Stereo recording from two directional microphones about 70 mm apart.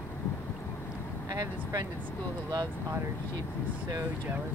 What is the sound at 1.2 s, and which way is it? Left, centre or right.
Speech, right.